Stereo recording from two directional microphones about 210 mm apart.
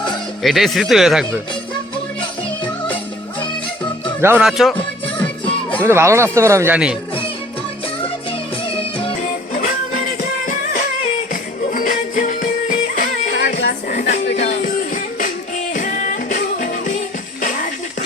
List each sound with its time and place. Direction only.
0.4 s speech: centre (ahead or behind)
2.6 s music: 5° left (ahead or behind)
4.2 s speech: 10° right (ahead or behind)
4.8 s music: 25° left (ahead or behind)
5.2 s music: 5° left (ahead or behind)
5.8 s speech: 10° right (ahead or behind)
8.3 s music: 25° left (ahead or behind)
9.5 s music: 40° left (ahead or behind)
13.9 s a sound: 35° left (ahead or behind)
14.3 s music: 35° left (ahead or behind)